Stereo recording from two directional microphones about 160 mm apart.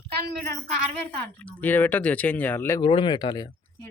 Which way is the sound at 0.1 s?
85° right.